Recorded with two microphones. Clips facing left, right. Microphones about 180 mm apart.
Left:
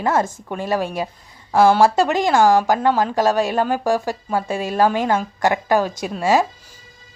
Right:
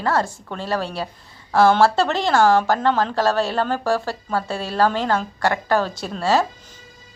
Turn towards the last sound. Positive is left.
turn(degrees=15)  # may be behind; listen again after turning